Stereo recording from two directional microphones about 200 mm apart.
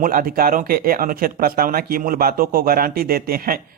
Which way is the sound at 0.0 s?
45° right (ahead or behind).